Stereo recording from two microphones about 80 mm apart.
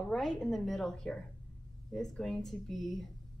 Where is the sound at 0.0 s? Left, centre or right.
Centre.